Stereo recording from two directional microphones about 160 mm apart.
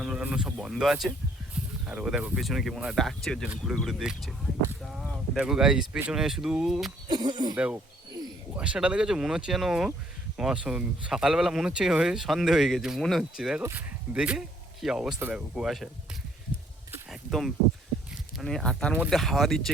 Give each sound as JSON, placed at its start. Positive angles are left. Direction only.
{"t": 0.0, "sound": "speech", "side_deg": -5}
{"t": 7.1, "sound": "speech", "side_deg": -25}
{"t": 7.5, "sound": "speech", "side_deg": -10}
{"t": 17.1, "sound": "a sound", "side_deg": 0}
{"t": 18.3, "sound": "speech", "side_deg": 0}